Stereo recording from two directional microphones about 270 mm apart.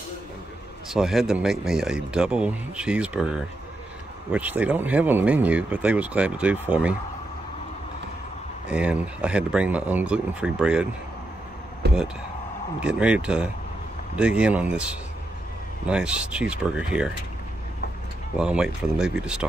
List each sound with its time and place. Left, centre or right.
0.8 s speech: centre
8.6 s speech: centre
11.8 s a sound: right
12.8 s speech: centre
18.3 s speech: centre